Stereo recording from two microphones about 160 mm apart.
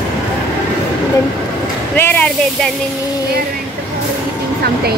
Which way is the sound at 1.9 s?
10° left (ahead or behind).